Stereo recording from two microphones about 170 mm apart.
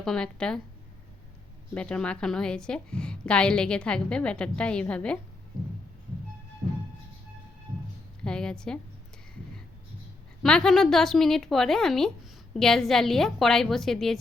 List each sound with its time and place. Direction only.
0.0 s a woman's voice: 5° left (ahead or behind)
1.7 s a woman's voice: 5° left (ahead or behind)
8.2 s a woman's voice: 5° left (ahead or behind)
10.4 s a woman's voice: 5° left (ahead or behind)